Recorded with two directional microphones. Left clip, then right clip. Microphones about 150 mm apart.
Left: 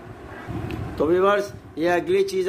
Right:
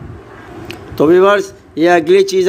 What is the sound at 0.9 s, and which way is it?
Speech, 75° right (ahead or behind).